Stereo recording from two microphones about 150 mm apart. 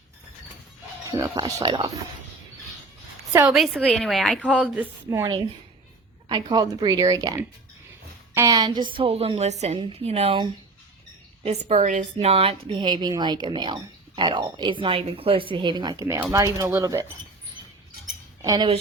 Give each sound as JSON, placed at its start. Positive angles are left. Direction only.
{"t": 1.0, "sound": "speech", "side_deg": -25}
{"t": 3.5, "sound": "a woman's voice", "side_deg": 0}
{"t": 6.2, "sound": "a woman's voice", "side_deg": -30}
{"t": 12.2, "sound": "a woman's voice", "side_deg": -40}
{"t": 18.4, "sound": "speech", "side_deg": -30}